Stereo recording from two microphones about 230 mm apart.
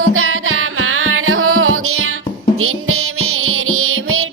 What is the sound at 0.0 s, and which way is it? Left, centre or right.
Music, right.